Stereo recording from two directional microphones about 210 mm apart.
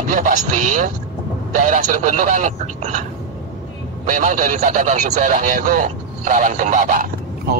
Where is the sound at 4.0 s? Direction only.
35° right (ahead or behind).